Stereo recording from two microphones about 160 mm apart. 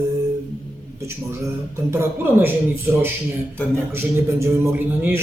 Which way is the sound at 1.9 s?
15° right (ahead or behind).